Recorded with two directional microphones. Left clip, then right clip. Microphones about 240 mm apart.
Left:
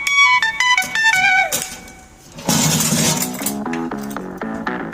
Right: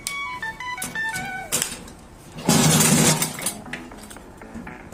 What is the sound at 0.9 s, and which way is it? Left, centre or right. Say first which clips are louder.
Music: left 11 dB; left.